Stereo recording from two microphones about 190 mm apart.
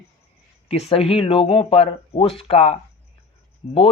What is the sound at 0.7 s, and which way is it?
Speech, 30° left (ahead or behind).